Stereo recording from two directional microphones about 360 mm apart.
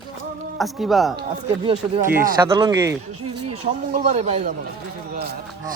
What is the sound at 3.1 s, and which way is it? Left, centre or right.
Speech, right.